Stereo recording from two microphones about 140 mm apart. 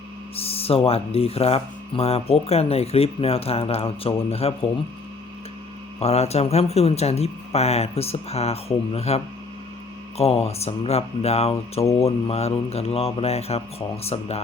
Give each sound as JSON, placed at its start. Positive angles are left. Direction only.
{"t": 0.3, "sound": "speech", "side_deg": 45}
{"t": 6.0, "sound": "speech", "side_deg": 50}